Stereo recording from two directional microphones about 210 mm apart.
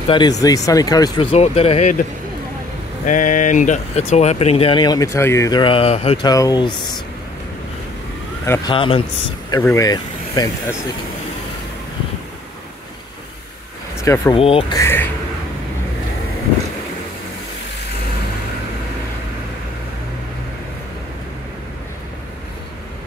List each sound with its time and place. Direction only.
0.1 s speech: 20° left (ahead or behind)
3.1 s speech: 40° left (ahead or behind)
6.2 s speech: 20° left (ahead or behind)
8.5 s speech: 20° left (ahead or behind)
9.5 s speech: 15° left (ahead or behind)
14.0 s speech: 15° left (ahead or behind)
14.3 s speech: 25° left (ahead or behind)
14.8 s speech: 10° left (ahead or behind)